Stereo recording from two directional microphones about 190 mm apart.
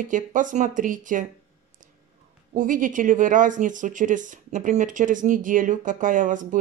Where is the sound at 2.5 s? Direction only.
45° right (ahead or behind).